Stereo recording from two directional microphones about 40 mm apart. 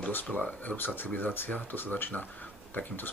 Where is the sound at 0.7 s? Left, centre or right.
Left.